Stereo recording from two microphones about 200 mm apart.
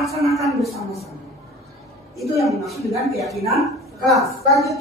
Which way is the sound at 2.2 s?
Centre (ahead or behind).